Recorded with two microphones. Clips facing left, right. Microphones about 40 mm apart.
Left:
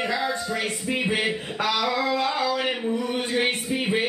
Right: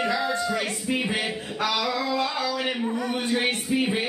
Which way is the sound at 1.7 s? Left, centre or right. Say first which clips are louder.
Left 4 dB; left.